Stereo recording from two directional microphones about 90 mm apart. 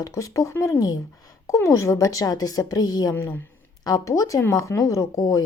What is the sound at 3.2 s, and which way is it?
Speech, 25° left (ahead or behind).